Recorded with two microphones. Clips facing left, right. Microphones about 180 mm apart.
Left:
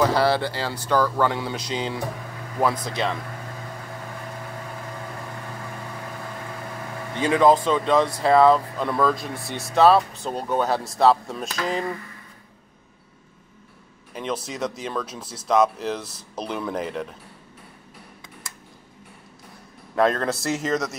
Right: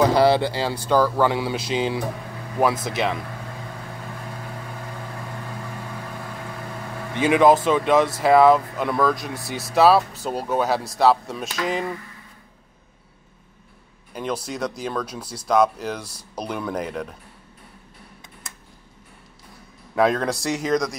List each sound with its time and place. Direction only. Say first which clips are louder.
0.0 s speech: right 3 dB; 15° right (ahead or behind)
7.2 s speech: right 2 dB; 15° right (ahead or behind)
8.8 s speech: even; centre (ahead or behind)
14.1 s speech: right 1 dB; centre (ahead or behind)
15.9 s speech: left 1 dB; 10° right (ahead or behind)
16.5 s speech: even; centre (ahead or behind)
20.0 s speech: right 1 dB; centre (ahead or behind)